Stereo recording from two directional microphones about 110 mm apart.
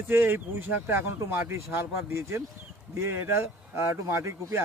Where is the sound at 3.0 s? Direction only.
25° right (ahead or behind).